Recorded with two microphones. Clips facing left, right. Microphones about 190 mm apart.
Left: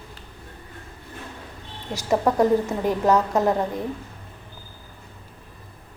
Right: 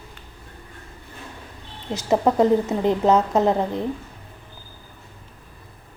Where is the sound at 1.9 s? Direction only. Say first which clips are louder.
Right 2 dB; 20° right (ahead or behind).